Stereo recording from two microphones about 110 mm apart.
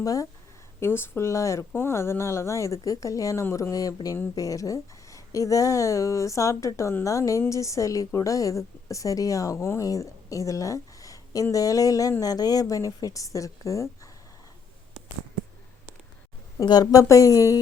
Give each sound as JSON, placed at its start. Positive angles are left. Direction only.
{"t": 0.0, "sound": "a woman's voice", "side_deg": 30}
{"t": 0.8, "sound": "a woman's voice", "side_deg": 20}
{"t": 16.6, "sound": "a woman's voice", "side_deg": 35}